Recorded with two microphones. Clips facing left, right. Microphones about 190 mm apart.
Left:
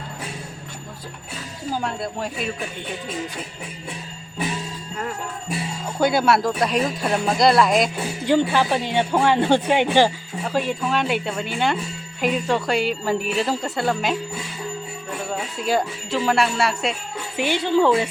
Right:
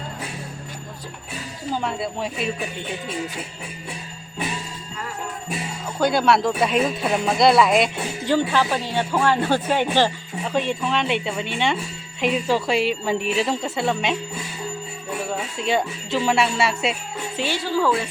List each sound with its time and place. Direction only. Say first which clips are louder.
1.8 s speech: right 1 dB; centre (ahead or behind)
6.0 s speech: even; 5° left (ahead or behind)
8.3 s speech: left 2 dB; 15° left (ahead or behind)
10.4 s speech: even; 5° left (ahead or behind)
15.3 s speech: left 1 dB; centre (ahead or behind)
17.3 s speech: left 4 dB; 15° left (ahead or behind)